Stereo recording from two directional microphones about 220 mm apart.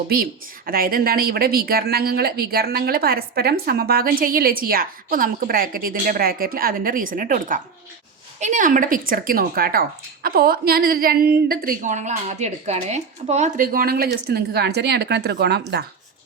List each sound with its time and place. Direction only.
0.1 s a woman's voice: 40° right (ahead or behind)